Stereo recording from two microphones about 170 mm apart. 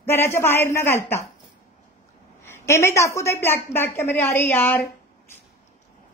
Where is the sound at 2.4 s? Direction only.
15° left (ahead or behind).